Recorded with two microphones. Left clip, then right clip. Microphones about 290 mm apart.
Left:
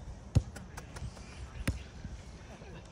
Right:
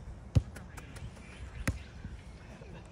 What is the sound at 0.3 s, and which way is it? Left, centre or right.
Basketball bounce, left.